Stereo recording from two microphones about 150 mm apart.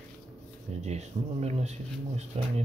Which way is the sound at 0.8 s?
45° right (ahead or behind).